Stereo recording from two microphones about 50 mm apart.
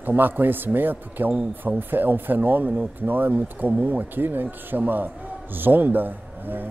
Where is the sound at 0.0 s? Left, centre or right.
Right.